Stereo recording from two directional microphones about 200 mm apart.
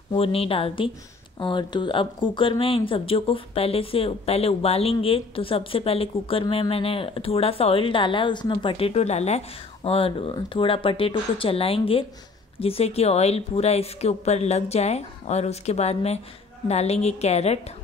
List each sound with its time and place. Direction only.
0.1 s a woman's voice: 30° left (ahead or behind)